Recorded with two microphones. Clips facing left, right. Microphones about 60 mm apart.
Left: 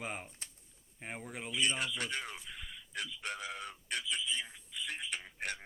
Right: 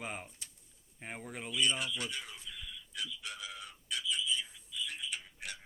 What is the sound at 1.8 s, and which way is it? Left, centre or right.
Speech, left.